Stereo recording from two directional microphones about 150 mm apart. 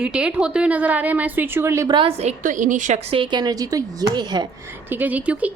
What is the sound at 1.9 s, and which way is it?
A woman's voice, 40° right (ahead or behind).